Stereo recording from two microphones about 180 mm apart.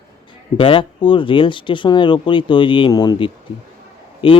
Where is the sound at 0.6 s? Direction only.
30° left (ahead or behind).